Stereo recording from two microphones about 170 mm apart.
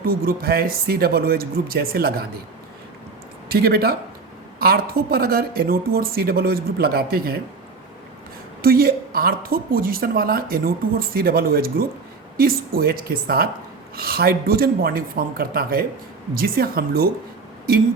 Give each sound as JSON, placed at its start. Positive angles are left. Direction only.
{"t": 0.0, "sound": "a woman's voice", "side_deg": -60}
{"t": 3.5, "sound": "a woman's voice", "side_deg": -65}
{"t": 8.6, "sound": "a woman's voice", "side_deg": -60}